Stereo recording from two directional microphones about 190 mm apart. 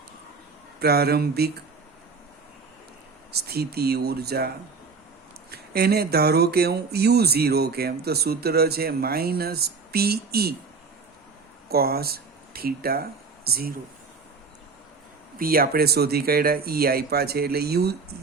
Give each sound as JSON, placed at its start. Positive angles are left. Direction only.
{"t": 0.8, "sound": "speech", "side_deg": -55}
{"t": 3.3, "sound": "speech", "side_deg": -55}
{"t": 11.7, "sound": "speech", "side_deg": -55}
{"t": 15.4, "sound": "speech", "side_deg": -50}